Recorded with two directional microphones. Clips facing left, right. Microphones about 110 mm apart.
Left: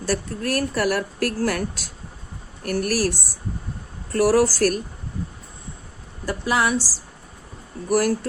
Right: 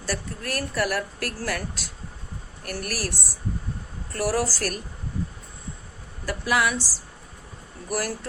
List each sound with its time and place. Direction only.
0.0 s speech: 40° left (ahead or behind)
4.1 s speech: 45° left (ahead or behind)
6.2 s speech: 30° left (ahead or behind)
7.9 s speech: 50° left (ahead or behind)